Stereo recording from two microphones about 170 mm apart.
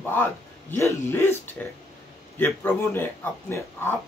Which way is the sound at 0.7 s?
15° left (ahead or behind).